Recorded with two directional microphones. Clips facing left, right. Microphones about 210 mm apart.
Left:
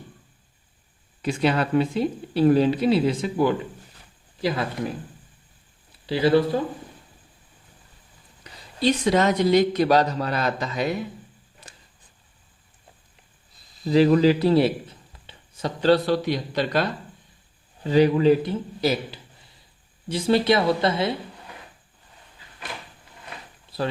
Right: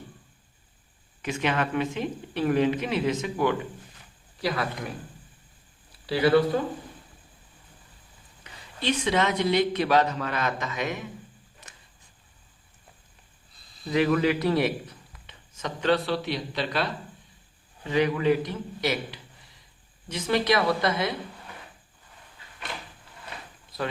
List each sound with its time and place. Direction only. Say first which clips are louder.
1.2 s speech: left 5 dB; 35° left (ahead or behind)
6.1 s speech: left 2 dB; 25° left (ahead or behind)
8.4 s speech: left 6 dB; 40° left (ahead or behind)
11.6 s a sound: left 4 dB; 30° left (ahead or behind)
13.8 s a man's voice: left 6 dB; 30° left (ahead or behind)
17.8 s speech: left 6 dB; 35° left (ahead or behind)